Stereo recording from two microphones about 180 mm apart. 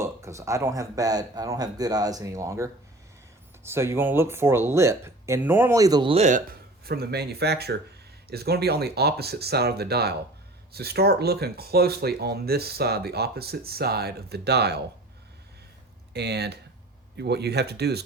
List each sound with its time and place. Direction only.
0.0 s speech: 15° right (ahead or behind)
3.7 s speech: 15° right (ahead or behind); by 6.4 s 40° right (ahead or behind)
6.8 s speech: 60° right (ahead or behind)
16.1 s speech: 65° right (ahead or behind)